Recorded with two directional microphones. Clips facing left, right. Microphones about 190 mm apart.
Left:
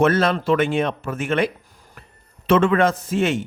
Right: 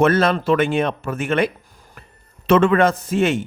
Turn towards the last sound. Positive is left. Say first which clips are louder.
# right 2 dB
turn(degrees=-55)  # may be behind; listen again after turning